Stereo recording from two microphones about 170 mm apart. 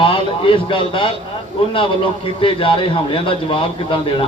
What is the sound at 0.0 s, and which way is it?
A man's voice, 30° left (ahead or behind).